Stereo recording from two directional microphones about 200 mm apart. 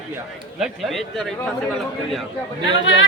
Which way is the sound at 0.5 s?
Centre (ahead or behind).